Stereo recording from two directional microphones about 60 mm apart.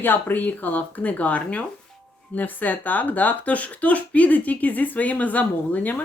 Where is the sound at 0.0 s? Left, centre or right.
Left.